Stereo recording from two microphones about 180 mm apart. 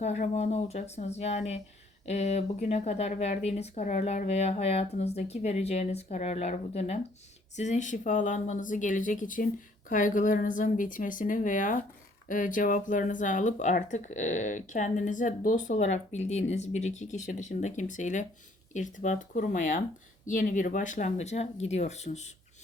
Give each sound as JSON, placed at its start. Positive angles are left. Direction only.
{"t": 0.0, "sound": "speech", "side_deg": 40}